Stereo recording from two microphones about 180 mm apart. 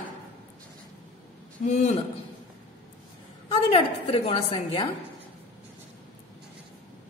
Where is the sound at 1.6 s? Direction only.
40° left (ahead or behind).